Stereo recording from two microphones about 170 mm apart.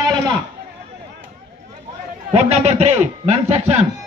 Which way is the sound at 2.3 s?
40° right (ahead or behind).